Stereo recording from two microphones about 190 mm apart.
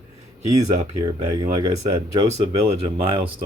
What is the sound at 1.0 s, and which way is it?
Speech, 25° right (ahead or behind).